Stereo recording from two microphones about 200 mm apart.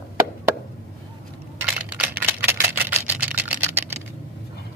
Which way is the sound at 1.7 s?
5° right (ahead or behind).